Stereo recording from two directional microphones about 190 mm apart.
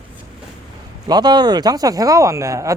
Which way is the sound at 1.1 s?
20° right (ahead or behind).